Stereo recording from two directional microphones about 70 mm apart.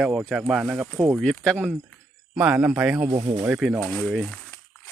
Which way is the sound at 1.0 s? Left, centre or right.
Right.